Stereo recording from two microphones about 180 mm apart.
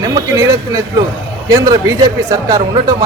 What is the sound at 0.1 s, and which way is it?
A man's voice, 20° right (ahead or behind).